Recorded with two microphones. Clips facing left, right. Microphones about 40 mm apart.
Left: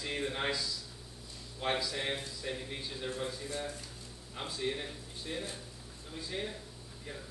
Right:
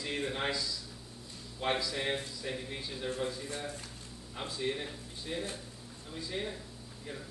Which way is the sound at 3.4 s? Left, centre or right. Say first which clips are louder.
Left 1 dB; right.